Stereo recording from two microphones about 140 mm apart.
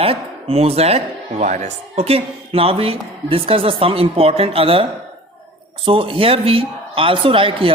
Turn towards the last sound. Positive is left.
turn(degrees=-40)  # may be behind; listen again after turning